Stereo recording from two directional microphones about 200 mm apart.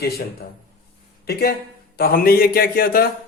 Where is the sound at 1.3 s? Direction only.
50° left (ahead or behind).